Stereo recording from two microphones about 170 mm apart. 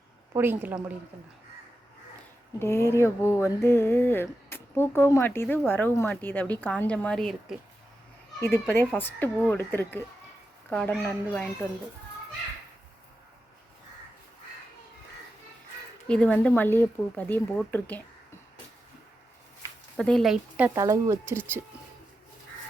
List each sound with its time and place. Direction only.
0.3 s speech: 10° right (ahead or behind)
2.6 s speech: 15° left (ahead or behind)
8.4 s speech: 15° left (ahead or behind)
16.0 s speech: 5° left (ahead or behind)
20.0 s speech: 5° left (ahead or behind)
20.7 s speech: 15° right (ahead or behind)